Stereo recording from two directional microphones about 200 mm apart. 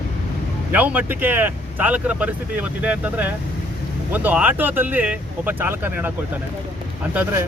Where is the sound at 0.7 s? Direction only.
10° right (ahead or behind).